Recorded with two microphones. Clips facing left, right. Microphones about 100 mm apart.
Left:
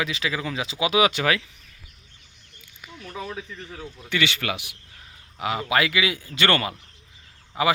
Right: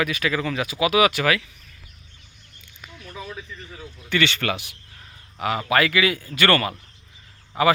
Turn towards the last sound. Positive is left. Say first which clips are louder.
# right 3 dB
turn(degrees=20)  # may be behind; listen again after turning